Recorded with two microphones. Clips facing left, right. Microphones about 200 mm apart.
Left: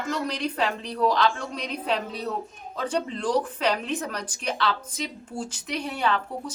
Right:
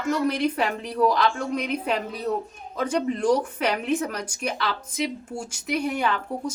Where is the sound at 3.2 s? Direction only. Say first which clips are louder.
Right 1 dB; 10° right (ahead or behind).